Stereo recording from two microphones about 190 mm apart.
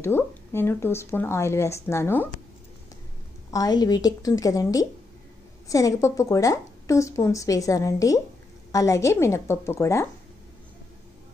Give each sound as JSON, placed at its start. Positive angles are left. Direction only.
{"t": 0.0, "sound": "a woman's voice", "side_deg": 10}
{"t": 3.5, "sound": "a woman's voice", "side_deg": 20}